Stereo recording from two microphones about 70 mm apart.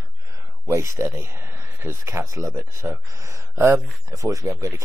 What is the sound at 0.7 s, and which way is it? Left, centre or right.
Speech, right.